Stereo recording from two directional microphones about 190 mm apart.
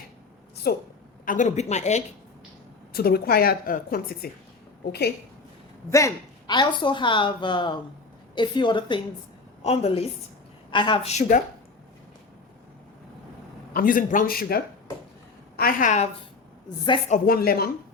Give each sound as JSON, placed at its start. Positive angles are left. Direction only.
{"t": 0.7, "sound": "a woman's voice", "side_deg": 55}
{"t": 1.2, "sound": "speech", "side_deg": 45}
{"t": 2.9, "sound": "a woman's voice", "side_deg": 55}
{"t": 5.9, "sound": "a woman's voice", "side_deg": 15}
{"t": 13.7, "sound": "a woman's voice", "side_deg": 45}
{"t": 17.1, "sound": "a woman's voice", "side_deg": 50}